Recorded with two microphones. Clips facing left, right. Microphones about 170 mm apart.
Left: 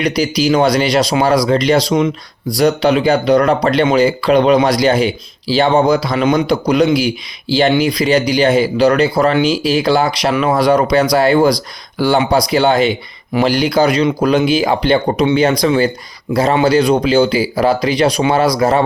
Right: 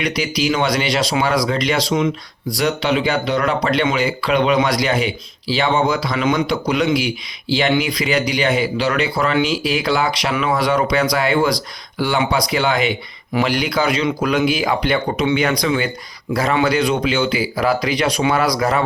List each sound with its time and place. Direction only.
0.0 s a man's voice: 35° left (ahead or behind)